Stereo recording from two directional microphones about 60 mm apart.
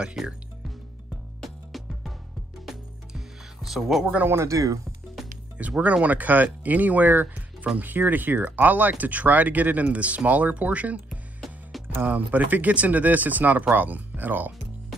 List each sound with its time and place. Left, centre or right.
0.0 s music: centre
3.7 s speech: centre
4.3 s speech: right
5.6 s speech: right
12.0 s speech: right